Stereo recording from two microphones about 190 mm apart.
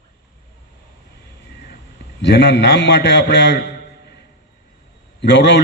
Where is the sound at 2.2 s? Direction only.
60° left (ahead or behind).